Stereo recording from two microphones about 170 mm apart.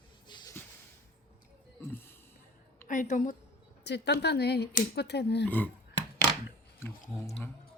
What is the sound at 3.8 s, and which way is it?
Speech, 80° left.